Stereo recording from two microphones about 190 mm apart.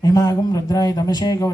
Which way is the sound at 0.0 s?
20° left (ahead or behind).